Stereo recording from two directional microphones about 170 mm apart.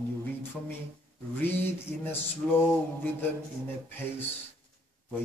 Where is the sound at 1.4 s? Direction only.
10° left (ahead or behind).